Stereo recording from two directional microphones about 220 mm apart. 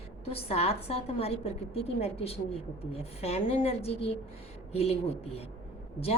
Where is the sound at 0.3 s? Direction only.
25° left (ahead or behind).